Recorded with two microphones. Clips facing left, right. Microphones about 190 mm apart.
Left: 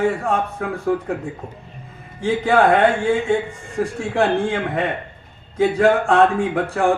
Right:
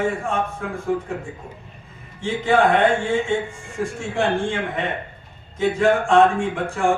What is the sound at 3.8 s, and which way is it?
A man's voice, 60° left (ahead or behind).